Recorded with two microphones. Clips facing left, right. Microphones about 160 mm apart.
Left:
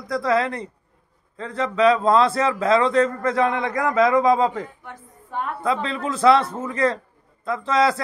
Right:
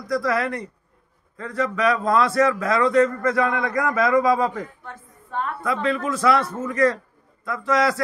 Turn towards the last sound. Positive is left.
turn(degrees=25)  # may be behind; listen again after turning